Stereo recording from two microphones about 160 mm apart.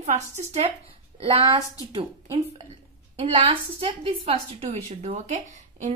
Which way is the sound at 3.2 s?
35° right (ahead or behind).